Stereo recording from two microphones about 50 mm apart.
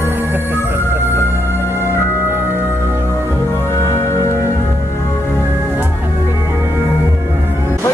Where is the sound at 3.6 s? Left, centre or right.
Left.